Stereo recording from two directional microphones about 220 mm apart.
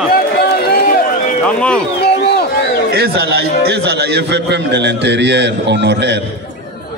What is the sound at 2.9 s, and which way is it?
A man's voice, 45° right (ahead or behind).